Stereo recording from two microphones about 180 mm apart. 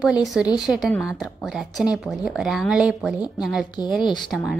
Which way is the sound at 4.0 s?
25° left (ahead or behind).